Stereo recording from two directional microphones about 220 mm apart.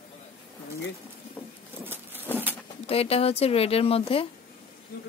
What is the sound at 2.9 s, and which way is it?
Speech, 25° left (ahead or behind).